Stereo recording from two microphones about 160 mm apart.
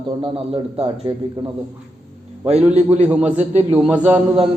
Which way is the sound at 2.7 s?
45° right (ahead or behind).